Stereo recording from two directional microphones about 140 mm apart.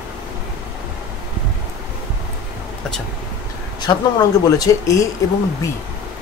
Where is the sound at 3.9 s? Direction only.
35° left (ahead or behind).